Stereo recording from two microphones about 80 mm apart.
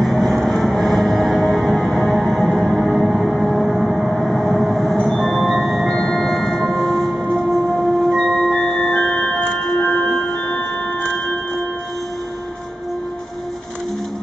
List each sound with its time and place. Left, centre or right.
0.0 s music: centre